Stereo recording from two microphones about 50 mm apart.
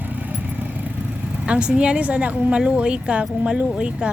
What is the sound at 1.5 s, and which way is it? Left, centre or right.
A woman's voice, right.